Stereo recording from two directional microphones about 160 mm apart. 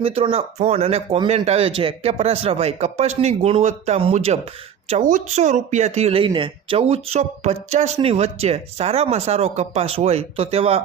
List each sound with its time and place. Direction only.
0.0 s speech: 35° right (ahead or behind)